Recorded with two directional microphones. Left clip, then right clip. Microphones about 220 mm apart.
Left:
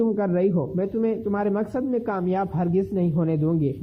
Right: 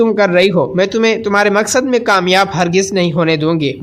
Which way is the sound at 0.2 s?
20° right (ahead or behind).